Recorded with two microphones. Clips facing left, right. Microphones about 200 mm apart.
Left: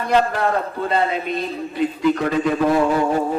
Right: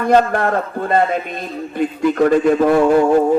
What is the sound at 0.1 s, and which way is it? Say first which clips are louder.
A man's voice: right 3 dB; 50° right (ahead or behind).